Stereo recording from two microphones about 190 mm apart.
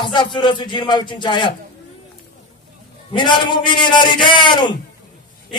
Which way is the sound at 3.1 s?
25° left (ahead or behind).